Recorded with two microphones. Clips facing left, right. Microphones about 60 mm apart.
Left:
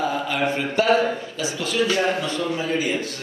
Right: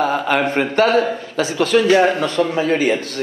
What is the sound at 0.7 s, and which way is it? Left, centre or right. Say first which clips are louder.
A man's voice: right 3 dB; right.